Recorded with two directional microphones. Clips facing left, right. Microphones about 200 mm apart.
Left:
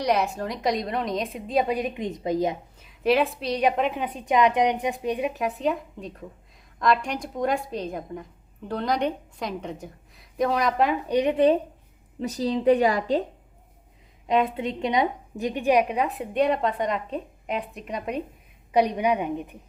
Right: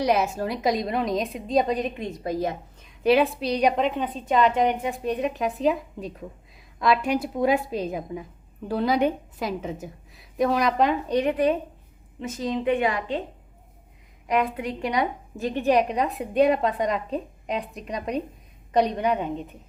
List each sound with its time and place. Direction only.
0.0 s a woman's voice: centre (ahead or behind); by 2.6 s 20° left (ahead or behind)
2.8 s a woman's voice: centre (ahead or behind)
11.2 s speech: 25° left (ahead or behind)
12.2 s a woman's voice: 35° left (ahead or behind)
14.3 s a woman's voice: 25° left (ahead or behind)